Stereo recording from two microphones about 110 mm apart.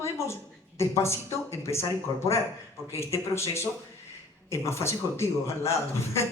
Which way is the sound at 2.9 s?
25° left (ahead or behind).